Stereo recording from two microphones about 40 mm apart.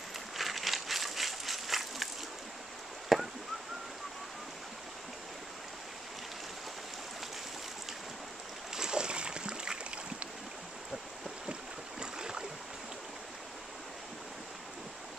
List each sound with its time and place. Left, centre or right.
0.4 s a sound: centre
3.1 s chop: centre
8.7 s boat: centre
12.0 s boat: right